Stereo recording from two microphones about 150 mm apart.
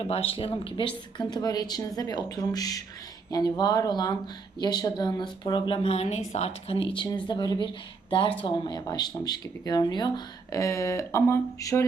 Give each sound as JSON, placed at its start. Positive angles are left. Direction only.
{"t": 0.0, "sound": "speech", "side_deg": 40}